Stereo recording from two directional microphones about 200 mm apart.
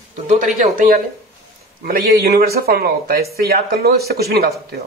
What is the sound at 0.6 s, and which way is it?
A man's voice, 45° right (ahead or behind).